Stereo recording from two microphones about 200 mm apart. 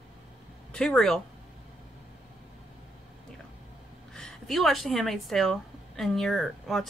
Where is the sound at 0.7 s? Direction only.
5° left (ahead or behind).